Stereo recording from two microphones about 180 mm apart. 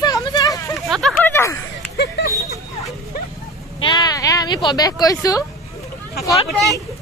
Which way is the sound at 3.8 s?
25° left (ahead or behind).